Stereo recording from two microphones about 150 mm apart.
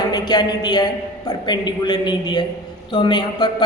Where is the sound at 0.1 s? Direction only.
30° left (ahead or behind).